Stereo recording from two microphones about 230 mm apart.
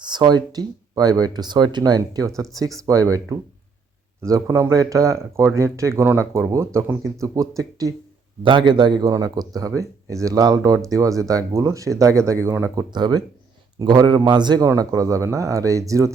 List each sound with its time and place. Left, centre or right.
0.0 s speech: centre
4.2 s a man's voice: centre